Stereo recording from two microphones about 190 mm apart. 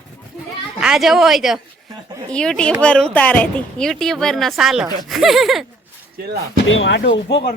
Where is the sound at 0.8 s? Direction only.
Centre (ahead or behind).